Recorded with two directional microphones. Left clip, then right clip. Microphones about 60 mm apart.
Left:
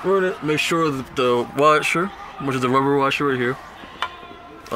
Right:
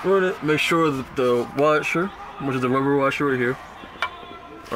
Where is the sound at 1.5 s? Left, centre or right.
Left.